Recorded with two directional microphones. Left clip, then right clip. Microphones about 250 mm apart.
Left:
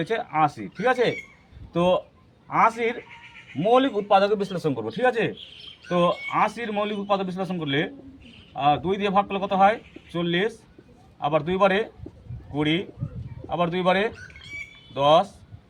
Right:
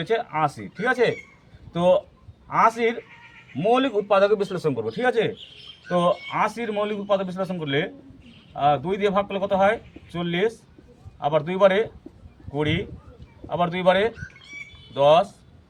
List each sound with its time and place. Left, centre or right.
0.0 s speech: centre
2.5 s speech: centre
14.3 s bird: left
14.9 s speech: centre